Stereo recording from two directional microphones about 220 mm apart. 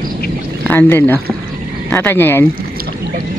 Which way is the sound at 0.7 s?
10° left (ahead or behind).